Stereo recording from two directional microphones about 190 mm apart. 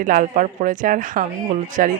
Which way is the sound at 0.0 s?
45° right (ahead or behind).